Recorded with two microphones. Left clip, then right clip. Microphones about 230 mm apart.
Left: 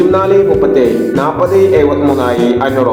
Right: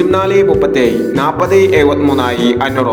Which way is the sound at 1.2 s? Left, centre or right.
Right.